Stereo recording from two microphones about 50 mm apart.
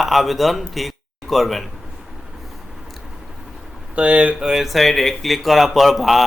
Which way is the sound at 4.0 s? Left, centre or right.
Right.